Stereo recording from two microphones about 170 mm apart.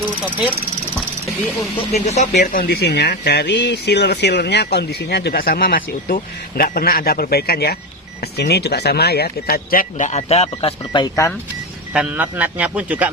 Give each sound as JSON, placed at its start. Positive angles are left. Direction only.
{"t": 1.9, "sound": "speech", "side_deg": 40}
{"t": 11.9, "sound": "a man's voice", "side_deg": -10}